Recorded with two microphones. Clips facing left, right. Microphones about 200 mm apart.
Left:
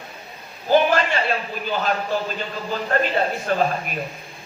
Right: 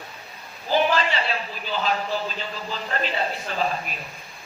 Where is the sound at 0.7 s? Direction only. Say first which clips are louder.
Left 4 dB; 50° left (ahead or behind).